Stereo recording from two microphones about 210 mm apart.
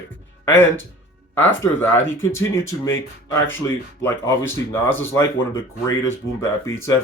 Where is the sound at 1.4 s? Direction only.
10° left (ahead or behind).